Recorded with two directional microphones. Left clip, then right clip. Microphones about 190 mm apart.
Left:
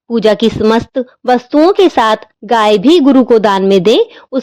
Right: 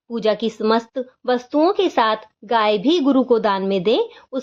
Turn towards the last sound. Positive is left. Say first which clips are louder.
# left 9 dB
turn(degrees=40)  # may be behind; listen again after turning